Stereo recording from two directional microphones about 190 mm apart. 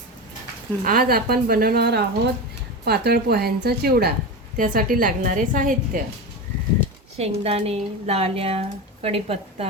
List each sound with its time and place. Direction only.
0.9 s a woman's voice: 50° right (ahead or behind)
7.2 s speech: 30° right (ahead or behind)